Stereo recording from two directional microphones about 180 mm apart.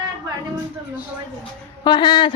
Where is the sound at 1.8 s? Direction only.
25° left (ahead or behind).